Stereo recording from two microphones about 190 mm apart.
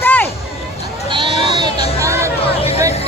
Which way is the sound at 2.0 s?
15° right (ahead or behind).